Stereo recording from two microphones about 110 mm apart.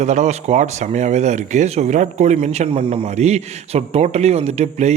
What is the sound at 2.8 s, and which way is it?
A man's voice, 55° right (ahead or behind).